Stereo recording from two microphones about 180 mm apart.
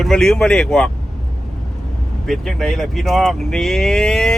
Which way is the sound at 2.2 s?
Centre (ahead or behind).